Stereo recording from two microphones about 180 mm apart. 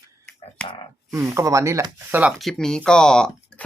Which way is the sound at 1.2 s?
15° right (ahead or behind).